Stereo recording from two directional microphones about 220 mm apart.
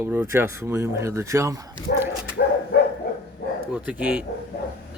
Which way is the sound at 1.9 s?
45° left (ahead or behind).